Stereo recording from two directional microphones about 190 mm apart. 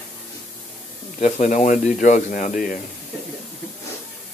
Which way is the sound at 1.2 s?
40° left (ahead or behind).